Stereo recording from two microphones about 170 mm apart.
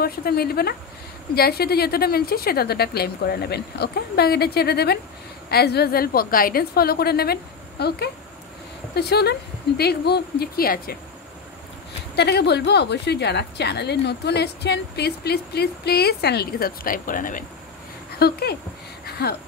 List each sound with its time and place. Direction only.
0.0 s a woman's voice: 65° left (ahead or behind)
12.2 s a woman's voice: 75° left (ahead or behind); by 17.5 s 50° left (ahead or behind)
18.2 s a woman's voice: 70° left (ahead or behind)
19.0 s a sound: 70° left (ahead or behind)